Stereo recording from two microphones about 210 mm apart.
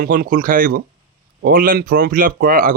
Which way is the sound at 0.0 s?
45° right (ahead or behind).